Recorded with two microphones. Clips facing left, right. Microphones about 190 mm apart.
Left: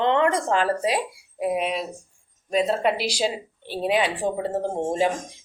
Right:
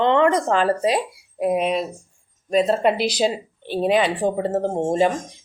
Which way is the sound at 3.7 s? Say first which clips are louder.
Right 5 dB; 45° right (ahead or behind).